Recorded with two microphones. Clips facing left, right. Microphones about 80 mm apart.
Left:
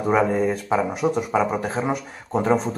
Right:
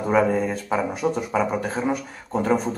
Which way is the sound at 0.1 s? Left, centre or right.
Centre.